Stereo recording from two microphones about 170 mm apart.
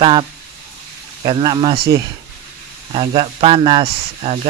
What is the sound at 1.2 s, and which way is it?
Speech, 30° right (ahead or behind).